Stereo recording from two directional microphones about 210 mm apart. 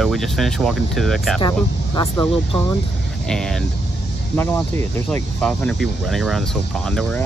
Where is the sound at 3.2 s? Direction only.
Centre (ahead or behind).